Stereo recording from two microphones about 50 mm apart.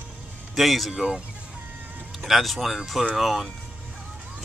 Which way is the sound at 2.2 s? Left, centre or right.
Centre.